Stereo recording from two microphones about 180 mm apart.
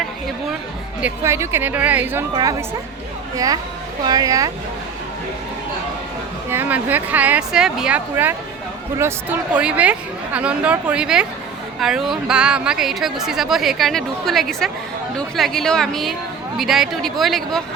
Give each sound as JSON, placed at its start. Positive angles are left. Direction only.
{"t": 1.0, "sound": "speech", "side_deg": -15}
{"t": 2.3, "sound": "speech", "side_deg": -20}
{"t": 6.5, "sound": "a woman's voice", "side_deg": -10}